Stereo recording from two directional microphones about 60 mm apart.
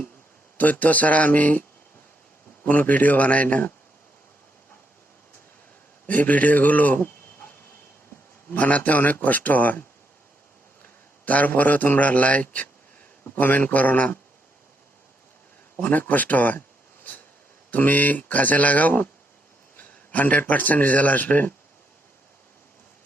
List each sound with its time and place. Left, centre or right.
0.5 s speech: left
2.6 s speech: left
6.1 s a man's voice: left
8.4 s speech: left
10.8 s a man's voice: left
15.8 s speech: left
19.7 s a sound: left
20.5 s speech: left